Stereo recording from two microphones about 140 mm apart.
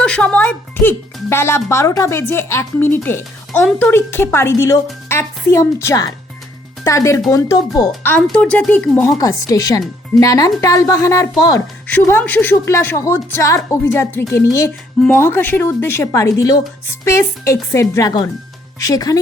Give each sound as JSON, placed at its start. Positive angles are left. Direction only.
{"t": 0.0, "sound": "speech", "side_deg": 5}
{"t": 8.0, "sound": "speech", "side_deg": 10}
{"t": 9.0, "sound": "speech", "side_deg": 25}
{"t": 11.9, "sound": "speech", "side_deg": 15}